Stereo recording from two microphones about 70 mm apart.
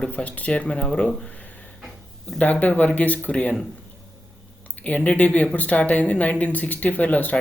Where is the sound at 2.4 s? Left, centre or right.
Left.